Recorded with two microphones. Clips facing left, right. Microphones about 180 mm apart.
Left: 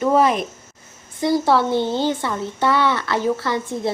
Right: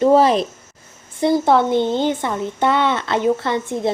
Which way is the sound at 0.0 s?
30° right (ahead or behind).